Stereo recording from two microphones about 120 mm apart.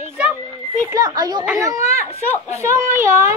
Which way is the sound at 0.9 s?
35° right (ahead or behind).